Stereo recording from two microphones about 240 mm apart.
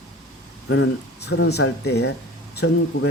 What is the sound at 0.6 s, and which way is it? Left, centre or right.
Speech, left.